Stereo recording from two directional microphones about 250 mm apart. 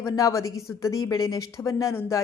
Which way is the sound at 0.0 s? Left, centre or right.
Centre.